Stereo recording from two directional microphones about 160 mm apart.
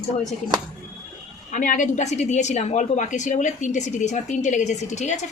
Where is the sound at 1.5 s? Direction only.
55° left (ahead or behind).